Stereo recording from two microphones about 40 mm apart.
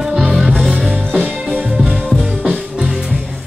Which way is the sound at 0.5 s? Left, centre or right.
Centre.